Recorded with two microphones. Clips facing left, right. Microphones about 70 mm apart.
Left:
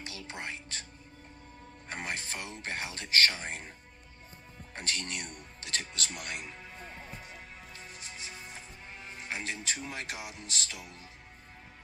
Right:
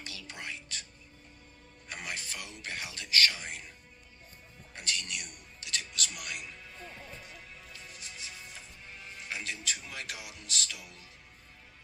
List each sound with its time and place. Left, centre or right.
0.0 s music: left
1.9 s speech: left
4.7 s music: left